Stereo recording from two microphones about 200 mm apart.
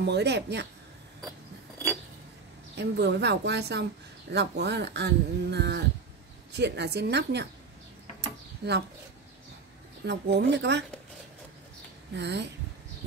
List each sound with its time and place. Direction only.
0.0 s speech: 55° right (ahead or behind)
2.7 s speech: 60° right (ahead or behind)
8.6 s speech: 55° right (ahead or behind)
10.0 s speech: 60° right (ahead or behind)
12.1 s speech: 60° right (ahead or behind)